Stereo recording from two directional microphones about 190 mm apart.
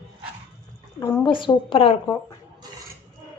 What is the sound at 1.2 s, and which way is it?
Speech, 25° left (ahead or behind).